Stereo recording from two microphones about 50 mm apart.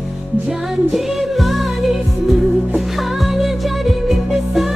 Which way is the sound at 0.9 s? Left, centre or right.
Centre.